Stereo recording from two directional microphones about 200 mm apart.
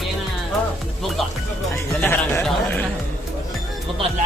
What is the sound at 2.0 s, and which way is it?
Speech, 10° left (ahead or behind).